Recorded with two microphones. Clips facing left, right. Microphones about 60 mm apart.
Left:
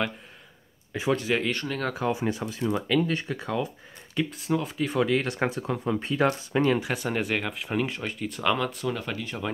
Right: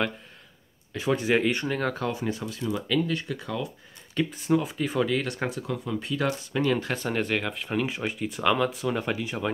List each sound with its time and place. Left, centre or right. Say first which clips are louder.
0.9 s speech: left 2 dB; centre
1.3 s speech: right 3 dB; centre
2.0 s speech: left 2 dB; centre
4.1 s speech: right 2 dB; centre
5.1 s speech: left 2 dB; left
6.7 s speech: left 1 dB; centre